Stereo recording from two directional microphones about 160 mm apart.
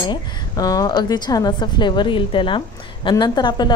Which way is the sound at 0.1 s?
25° left (ahead or behind).